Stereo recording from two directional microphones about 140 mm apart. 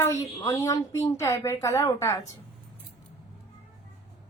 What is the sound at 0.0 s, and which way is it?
A woman's voice, 25° left (ahead or behind).